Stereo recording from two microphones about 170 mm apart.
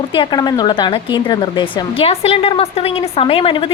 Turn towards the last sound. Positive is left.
turn(degrees=30)  # may be behind; listen again after turning